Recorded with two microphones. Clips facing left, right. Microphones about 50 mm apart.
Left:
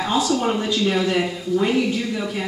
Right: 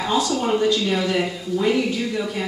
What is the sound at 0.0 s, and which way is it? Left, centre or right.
Speech, centre.